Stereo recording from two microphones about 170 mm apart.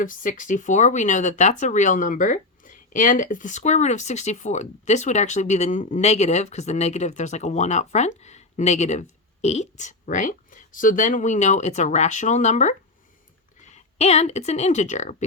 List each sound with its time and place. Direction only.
0.0 s speech: 50° left (ahead or behind)